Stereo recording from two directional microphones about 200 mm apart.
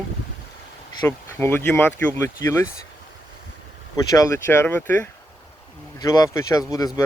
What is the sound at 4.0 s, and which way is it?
Speech, 15° left (ahead or behind).